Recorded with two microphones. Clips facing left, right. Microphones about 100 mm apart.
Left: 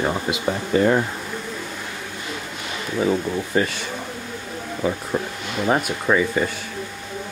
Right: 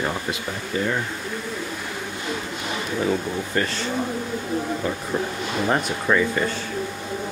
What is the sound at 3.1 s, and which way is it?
Speech, 10° left (ahead or behind).